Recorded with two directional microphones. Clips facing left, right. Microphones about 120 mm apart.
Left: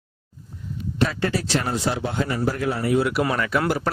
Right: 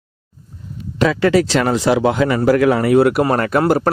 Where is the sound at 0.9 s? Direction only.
90° right.